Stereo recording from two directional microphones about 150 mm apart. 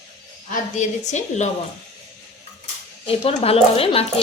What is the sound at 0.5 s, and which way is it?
Speech, 55° left (ahead or behind).